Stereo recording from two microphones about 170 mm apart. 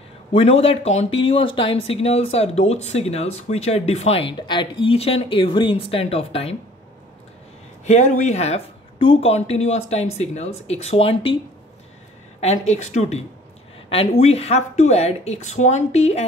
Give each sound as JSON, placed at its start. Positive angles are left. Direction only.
{"t": 0.3, "sound": "speech", "side_deg": 35}
{"t": 7.8, "sound": "speech", "side_deg": 45}
{"t": 12.4, "sound": "speech", "side_deg": 40}
{"t": 14.2, "sound": "speech", "side_deg": 40}